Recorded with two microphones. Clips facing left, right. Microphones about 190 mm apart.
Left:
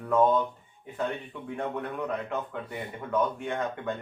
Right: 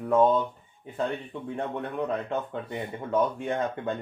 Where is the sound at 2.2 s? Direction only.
30° right (ahead or behind).